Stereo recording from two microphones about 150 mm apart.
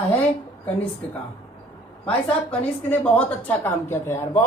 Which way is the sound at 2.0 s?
5° left (ahead or behind).